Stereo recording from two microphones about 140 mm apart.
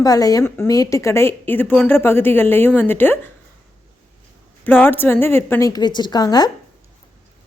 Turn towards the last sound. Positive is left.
turn(degrees=30)  # may be behind; listen again after turning